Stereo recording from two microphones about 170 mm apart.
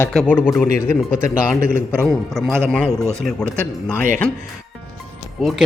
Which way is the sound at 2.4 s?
Centre (ahead or behind).